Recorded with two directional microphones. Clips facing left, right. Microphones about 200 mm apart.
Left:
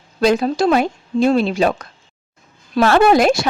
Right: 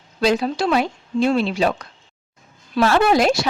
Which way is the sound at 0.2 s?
50° left (ahead or behind).